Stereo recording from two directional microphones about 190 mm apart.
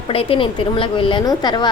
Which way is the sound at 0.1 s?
30° left (ahead or behind).